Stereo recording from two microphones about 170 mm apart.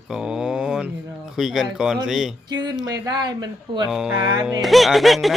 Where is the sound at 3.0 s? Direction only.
25° right (ahead or behind).